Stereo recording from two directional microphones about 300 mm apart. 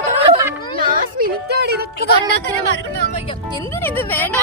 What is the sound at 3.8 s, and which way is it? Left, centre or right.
Speech, centre.